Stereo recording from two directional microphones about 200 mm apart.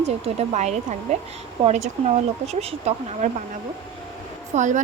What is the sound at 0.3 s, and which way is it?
Speech, 35° right (ahead or behind).